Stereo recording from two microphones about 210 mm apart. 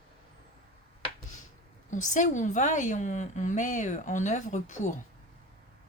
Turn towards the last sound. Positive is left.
turn(degrees=35)  # may be behind; listen again after turning